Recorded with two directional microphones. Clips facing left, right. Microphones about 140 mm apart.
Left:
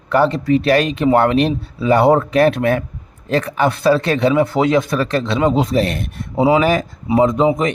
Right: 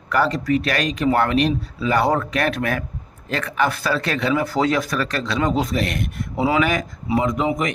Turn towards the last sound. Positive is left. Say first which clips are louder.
# left 7 dB
turn(degrees=30)  # may be behind; listen again after turning